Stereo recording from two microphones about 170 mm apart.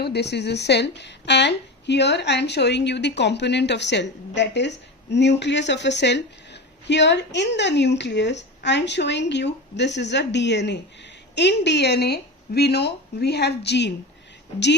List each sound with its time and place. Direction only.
0.0 s a woman's voice: 75° left (ahead or behind)